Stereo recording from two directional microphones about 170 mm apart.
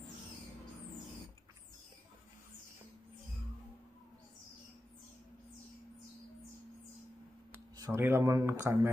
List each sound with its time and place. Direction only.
7.7 s speech: 15° right (ahead or behind)